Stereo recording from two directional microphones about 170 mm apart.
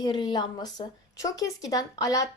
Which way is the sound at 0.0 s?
25° left (ahead or behind).